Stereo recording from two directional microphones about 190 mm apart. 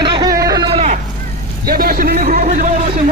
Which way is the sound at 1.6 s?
50° right (ahead or behind).